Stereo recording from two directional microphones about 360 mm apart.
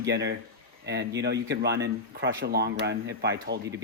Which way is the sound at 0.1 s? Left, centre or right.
Right.